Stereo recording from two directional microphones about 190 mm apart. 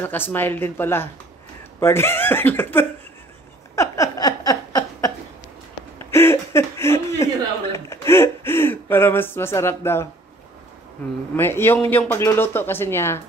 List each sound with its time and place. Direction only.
0.0 s speech: 10° left (ahead or behind)
3.7 s a sound: 15° left (ahead or behind)
11.3 s speech: 10° left (ahead or behind)